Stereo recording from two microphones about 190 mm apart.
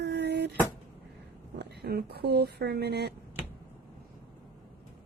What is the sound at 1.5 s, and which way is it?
Speech, 60° right (ahead or behind).